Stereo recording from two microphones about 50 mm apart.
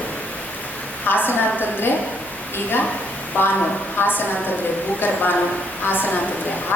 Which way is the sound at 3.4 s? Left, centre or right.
Left.